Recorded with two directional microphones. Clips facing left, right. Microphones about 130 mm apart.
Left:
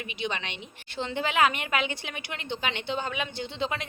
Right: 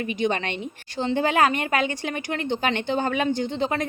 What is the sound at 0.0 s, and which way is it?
A woman's voice, 45° right (ahead or behind).